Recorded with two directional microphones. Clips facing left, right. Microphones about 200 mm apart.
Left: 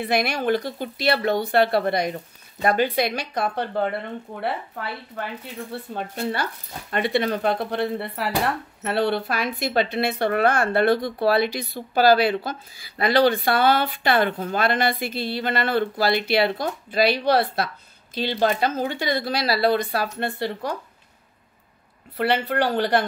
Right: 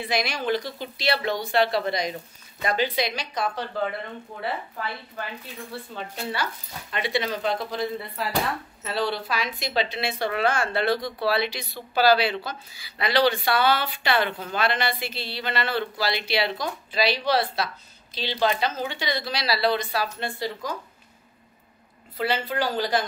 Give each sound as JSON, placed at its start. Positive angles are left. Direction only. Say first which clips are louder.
{"t": 0.0, "sound": "a woman's voice", "louder": "left 4 dB", "side_deg": 55}
{"t": 22.1, "sound": "speech", "louder": "left 4 dB", "side_deg": 65}